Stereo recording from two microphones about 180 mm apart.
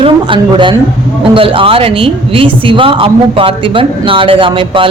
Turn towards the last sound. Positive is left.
turn(degrees=-30)  # may be behind; listen again after turning